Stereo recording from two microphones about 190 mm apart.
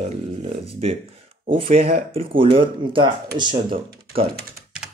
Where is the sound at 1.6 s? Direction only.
40° right (ahead or behind).